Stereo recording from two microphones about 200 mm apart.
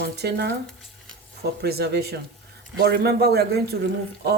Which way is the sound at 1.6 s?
55° right (ahead or behind).